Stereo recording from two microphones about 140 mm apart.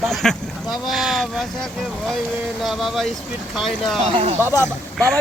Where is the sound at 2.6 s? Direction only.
Centre (ahead or behind).